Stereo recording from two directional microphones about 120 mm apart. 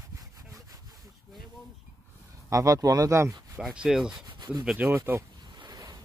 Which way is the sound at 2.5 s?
30° right (ahead or behind).